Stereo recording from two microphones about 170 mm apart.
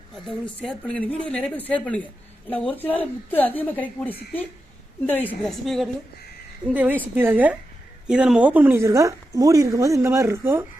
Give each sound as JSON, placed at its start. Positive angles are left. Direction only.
{"t": 0.6, "sound": "a woman's voice", "side_deg": 5}